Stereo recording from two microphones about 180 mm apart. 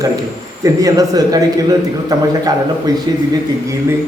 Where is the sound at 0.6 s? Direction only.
20° right (ahead or behind).